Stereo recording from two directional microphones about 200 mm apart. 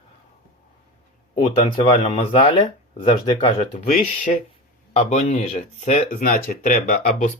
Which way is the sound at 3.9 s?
45° left (ahead or behind).